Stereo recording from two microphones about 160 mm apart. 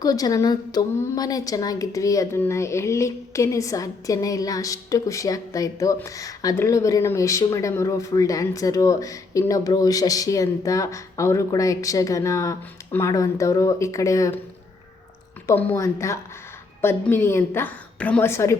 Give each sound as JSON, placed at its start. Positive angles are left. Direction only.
{"t": 0.0, "sound": "a woman's voice", "side_deg": 25}
{"t": 15.4, "sound": "a woman's voice", "side_deg": 15}